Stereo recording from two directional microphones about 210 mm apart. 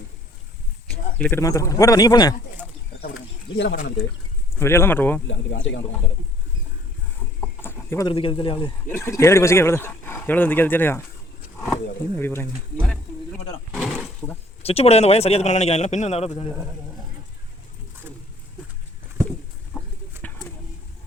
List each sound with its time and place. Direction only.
0.9 s speech: 10° left (ahead or behind)
4.6 s speech: 10° left (ahead or behind)
5.3 s speech: 60° left (ahead or behind)
7.6 s chicken: 10° left (ahead or behind)
8.0 s speech: 25° left (ahead or behind)
8.9 s speech: 10° left (ahead or behind)
13.7 s a sound: centre (ahead or behind)
14.6 s speech: 30° left (ahead or behind)